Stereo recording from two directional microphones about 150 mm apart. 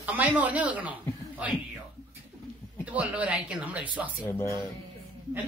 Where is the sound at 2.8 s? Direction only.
10° right (ahead or behind).